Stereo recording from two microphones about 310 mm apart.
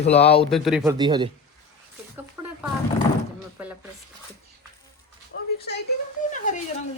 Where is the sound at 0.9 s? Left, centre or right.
Centre.